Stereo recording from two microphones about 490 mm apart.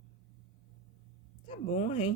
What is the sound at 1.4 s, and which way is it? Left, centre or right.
Speech, centre.